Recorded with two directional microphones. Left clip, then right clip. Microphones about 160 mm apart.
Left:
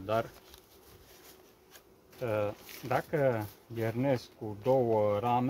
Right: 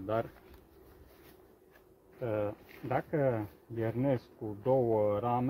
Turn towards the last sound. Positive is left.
turn(degrees=10)  # may be behind; listen again after turning